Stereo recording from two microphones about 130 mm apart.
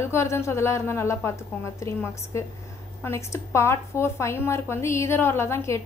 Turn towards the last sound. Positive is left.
turn(degrees=20)  # may be behind; listen again after turning